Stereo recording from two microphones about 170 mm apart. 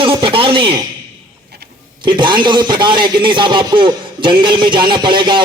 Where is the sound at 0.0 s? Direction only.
30° right (ahead or behind).